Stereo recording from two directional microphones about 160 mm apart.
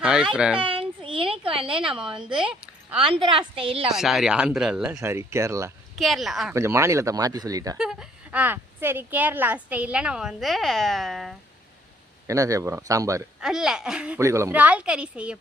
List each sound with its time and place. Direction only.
0.0 s a sound: 5° right (ahead or behind)
0.3 s speech: 5° right (ahead or behind)
0.6 s a sound: 35° right (ahead or behind)
1.7 s speech: 5° right (ahead or behind)
3.3 s a woman's voice: 35° right (ahead or behind)
3.9 s speech: centre (ahead or behind); by 5.7 s 20° right (ahead or behind)
6.0 s speech: centre (ahead or behind)
6.5 s speech: 15° right (ahead or behind)
7.8 s speech: 5° right (ahead or behind)
12.3 s speech: 20° right (ahead or behind)
13.4 s speech: 5° right (ahead or behind)
14.2 s speech: 20° right (ahead or behind)